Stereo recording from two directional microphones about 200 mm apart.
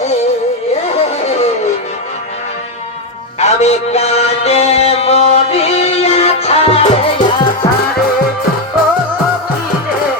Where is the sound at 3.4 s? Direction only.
35° left (ahead or behind).